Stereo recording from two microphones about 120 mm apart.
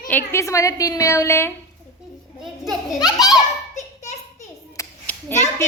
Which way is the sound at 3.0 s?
30° left (ahead or behind).